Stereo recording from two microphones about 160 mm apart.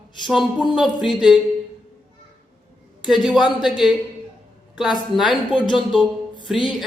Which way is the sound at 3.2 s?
Centre (ahead or behind).